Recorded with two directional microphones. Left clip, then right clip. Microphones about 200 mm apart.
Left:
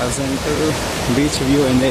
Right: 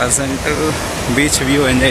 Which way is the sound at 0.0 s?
5° left (ahead or behind).